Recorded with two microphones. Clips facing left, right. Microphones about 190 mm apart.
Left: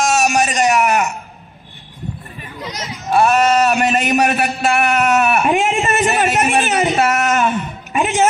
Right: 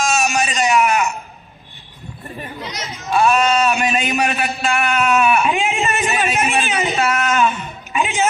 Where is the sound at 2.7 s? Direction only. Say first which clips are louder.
Left 3 dB; 45° left (ahead or behind).